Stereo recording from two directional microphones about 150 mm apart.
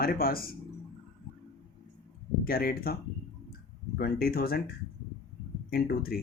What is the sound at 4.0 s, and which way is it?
Speech, 90° left.